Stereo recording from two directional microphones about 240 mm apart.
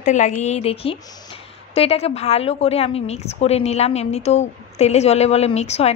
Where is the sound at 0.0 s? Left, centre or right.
Left.